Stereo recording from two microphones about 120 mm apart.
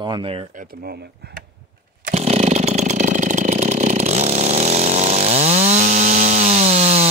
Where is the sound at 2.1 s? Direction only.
65° right (ahead or behind).